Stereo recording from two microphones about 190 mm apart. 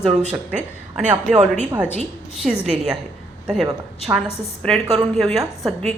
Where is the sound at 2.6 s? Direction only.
5° right (ahead or behind).